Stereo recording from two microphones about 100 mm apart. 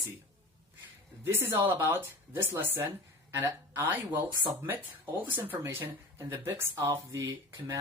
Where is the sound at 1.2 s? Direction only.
20° right (ahead or behind).